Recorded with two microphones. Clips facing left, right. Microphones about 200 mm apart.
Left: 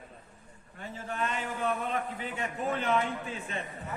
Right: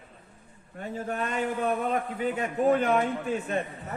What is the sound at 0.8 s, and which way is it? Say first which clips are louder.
A man's voice: right 4 dB; 40° right (ahead or behind).